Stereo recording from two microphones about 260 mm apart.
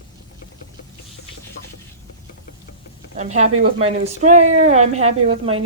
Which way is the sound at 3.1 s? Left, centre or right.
Right.